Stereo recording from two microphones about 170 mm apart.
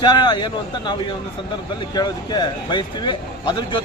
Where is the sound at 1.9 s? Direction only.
25° left (ahead or behind).